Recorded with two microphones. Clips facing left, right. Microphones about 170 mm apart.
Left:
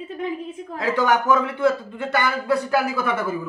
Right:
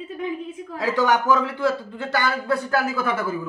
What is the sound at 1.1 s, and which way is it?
A woman's voice, 10° left (ahead or behind).